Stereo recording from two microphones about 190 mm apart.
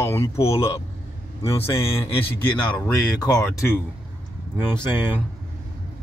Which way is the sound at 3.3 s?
5° left (ahead or behind).